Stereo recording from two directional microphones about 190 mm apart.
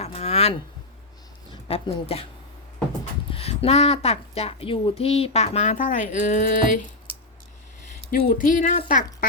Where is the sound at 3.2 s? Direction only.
30° left (ahead or behind).